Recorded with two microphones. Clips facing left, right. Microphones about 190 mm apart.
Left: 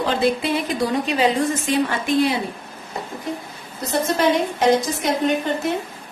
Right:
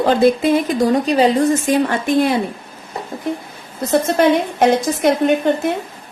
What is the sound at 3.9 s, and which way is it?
A woman's voice, 55° right (ahead or behind).